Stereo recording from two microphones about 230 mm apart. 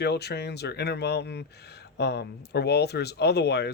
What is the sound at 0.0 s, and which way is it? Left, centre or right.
Speech, left.